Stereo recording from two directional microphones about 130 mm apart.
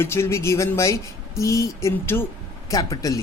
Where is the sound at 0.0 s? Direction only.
20° left (ahead or behind).